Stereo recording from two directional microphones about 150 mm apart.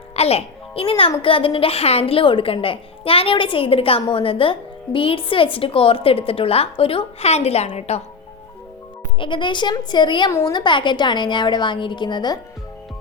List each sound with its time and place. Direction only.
0.2 s a woman's voice: 45° left (ahead or behind)
9.1 s a woman's voice: 35° left (ahead or behind)